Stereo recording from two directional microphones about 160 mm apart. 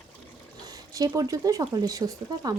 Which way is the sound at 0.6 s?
25° right (ahead or behind).